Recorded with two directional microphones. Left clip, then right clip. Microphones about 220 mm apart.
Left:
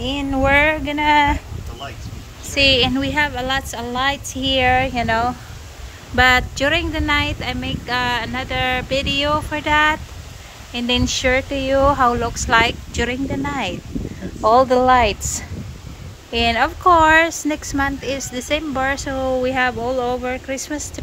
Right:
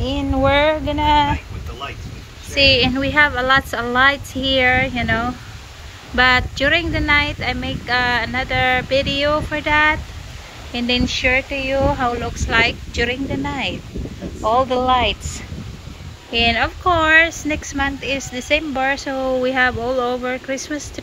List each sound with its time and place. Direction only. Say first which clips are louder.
0.0 s speech: right 1 dB; 10° left (ahead or behind)
2.5 s speech: right 1 dB; 10° left (ahead or behind)
14.4 s speech: left 3 dB; 30° left (ahead or behind); by 21.0 s 15° left (ahead or behind)